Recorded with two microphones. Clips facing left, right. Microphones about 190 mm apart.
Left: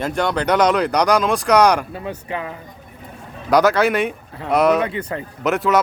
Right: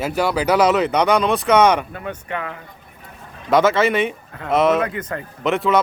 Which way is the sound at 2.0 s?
30° left (ahead or behind).